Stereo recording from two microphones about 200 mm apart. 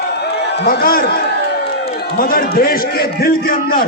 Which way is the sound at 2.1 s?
45° left (ahead or behind).